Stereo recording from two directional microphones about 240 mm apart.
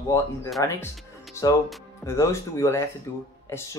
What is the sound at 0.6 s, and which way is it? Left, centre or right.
Speech, centre.